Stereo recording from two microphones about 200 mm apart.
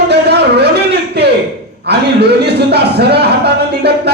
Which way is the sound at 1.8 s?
55° right (ahead or behind).